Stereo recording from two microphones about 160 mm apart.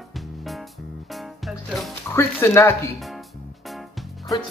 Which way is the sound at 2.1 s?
15° left (ahead or behind).